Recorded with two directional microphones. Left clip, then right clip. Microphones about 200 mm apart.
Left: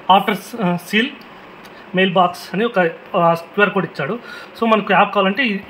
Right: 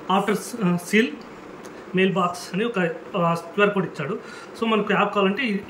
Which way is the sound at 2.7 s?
30° left (ahead or behind).